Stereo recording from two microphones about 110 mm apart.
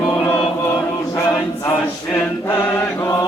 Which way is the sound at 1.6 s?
25° left (ahead or behind).